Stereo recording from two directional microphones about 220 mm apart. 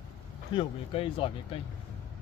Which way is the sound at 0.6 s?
25° left (ahead or behind).